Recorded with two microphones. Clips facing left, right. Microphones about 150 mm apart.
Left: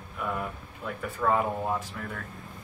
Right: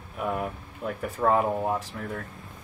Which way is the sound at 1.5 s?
15° right (ahead or behind).